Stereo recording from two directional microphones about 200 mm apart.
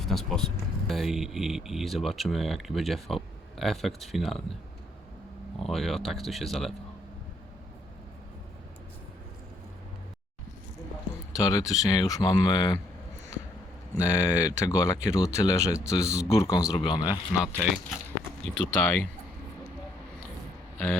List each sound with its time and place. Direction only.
0.0 s speech: centre (ahead or behind)
5.5 s speech: centre (ahead or behind)
11.3 s speech: 20° left (ahead or behind)
13.9 s speech: 15° left (ahead or behind)
17.3 s speech: 5° right (ahead or behind)
18.8 s speech: 10° left (ahead or behind)
20.7 s a sound: 5° left (ahead or behind)